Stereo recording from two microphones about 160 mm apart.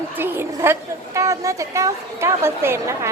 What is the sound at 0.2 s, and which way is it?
A woman's voice, 15° right (ahead or behind).